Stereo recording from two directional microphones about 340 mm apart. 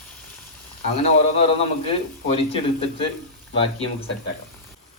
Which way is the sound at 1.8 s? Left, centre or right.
Centre.